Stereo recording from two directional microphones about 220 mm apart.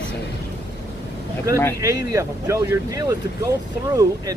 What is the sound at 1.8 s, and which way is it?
Speech, 15° right (ahead or behind).